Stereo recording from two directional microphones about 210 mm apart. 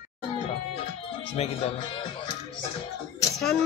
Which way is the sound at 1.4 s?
30° left (ahead or behind).